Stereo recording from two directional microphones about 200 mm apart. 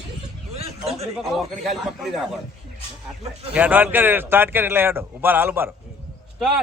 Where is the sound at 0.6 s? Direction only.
30° right (ahead or behind).